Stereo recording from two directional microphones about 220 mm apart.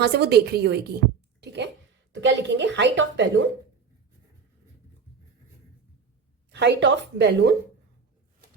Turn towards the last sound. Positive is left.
turn(degrees=-50)  # may be behind; listen again after turning